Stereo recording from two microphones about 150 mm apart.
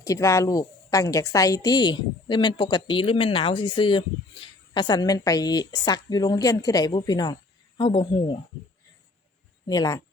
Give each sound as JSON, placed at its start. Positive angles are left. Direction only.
{"t": 0.0, "sound": "a woman's voice", "side_deg": 20}
{"t": 9.6, "sound": "a woman's voice", "side_deg": 25}